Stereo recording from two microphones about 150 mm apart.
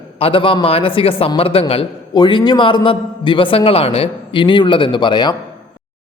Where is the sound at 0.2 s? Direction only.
40° left (ahead or behind).